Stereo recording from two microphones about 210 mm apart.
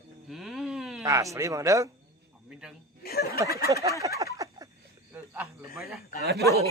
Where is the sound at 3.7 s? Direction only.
15° right (ahead or behind).